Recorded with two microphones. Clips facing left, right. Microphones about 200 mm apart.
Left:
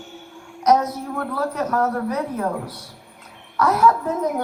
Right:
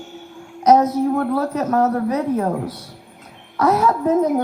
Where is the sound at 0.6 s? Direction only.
25° right (ahead or behind).